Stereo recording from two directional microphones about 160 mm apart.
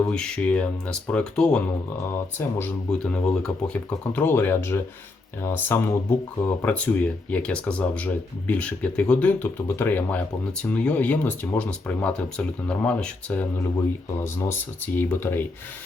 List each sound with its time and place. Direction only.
0.1 s speech: 5° left (ahead or behind)